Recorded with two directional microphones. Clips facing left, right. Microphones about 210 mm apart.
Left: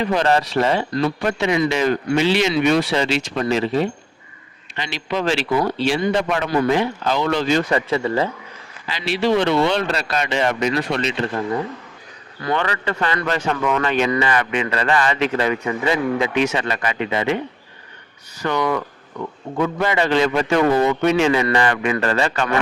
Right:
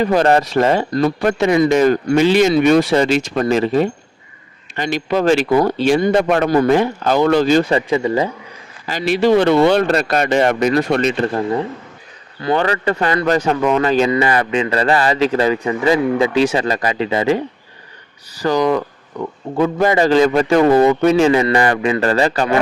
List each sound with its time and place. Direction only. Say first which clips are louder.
0.0 s speech: right 5 dB; 45° right (ahead or behind); by 8.3 s 15° right (ahead or behind)
8.9 s speech: right 5 dB; 45° right (ahead or behind)
12.4 s a man's voice: right 5 dB; 30° right (ahead or behind)